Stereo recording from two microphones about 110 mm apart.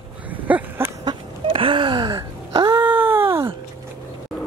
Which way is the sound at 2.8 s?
20° right (ahead or behind).